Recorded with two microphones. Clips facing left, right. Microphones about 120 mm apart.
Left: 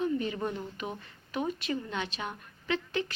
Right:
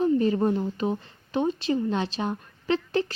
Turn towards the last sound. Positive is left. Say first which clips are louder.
# right 7 dB
turn(degrees=-35)  # may be behind; listen again after turning